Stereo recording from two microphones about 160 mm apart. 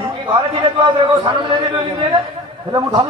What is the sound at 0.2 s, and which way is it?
A man's voice, 30° right (ahead or behind).